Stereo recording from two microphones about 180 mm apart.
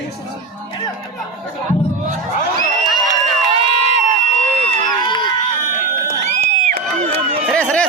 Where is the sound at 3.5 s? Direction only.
30° right (ahead or behind).